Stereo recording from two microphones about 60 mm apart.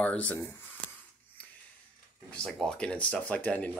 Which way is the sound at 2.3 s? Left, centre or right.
Centre.